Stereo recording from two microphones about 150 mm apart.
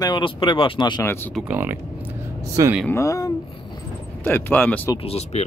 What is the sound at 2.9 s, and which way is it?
Speech, 20° left (ahead or behind).